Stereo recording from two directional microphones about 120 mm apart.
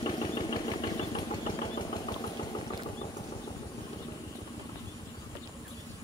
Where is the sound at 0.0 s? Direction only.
45° left (ahead or behind).